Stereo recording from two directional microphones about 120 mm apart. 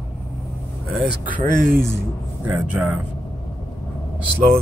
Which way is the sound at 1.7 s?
20° right (ahead or behind).